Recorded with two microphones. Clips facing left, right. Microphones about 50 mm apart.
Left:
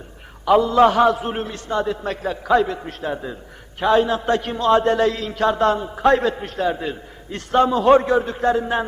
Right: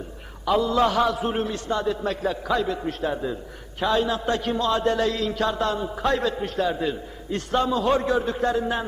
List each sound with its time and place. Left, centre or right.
0.4 s a man's voice: left
2.8 s a man's voice: left